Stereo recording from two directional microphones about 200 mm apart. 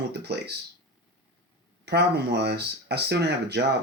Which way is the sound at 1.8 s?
55° right (ahead or behind).